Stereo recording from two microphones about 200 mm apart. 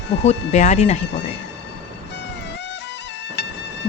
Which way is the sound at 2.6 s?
60° left (ahead or behind).